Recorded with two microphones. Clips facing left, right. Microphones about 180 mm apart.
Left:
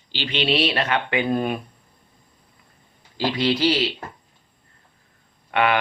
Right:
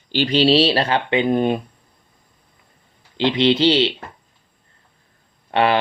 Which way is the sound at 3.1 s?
20° right (ahead or behind).